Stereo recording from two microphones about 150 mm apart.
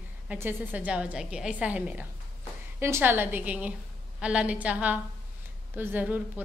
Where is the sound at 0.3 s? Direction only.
10° right (ahead or behind).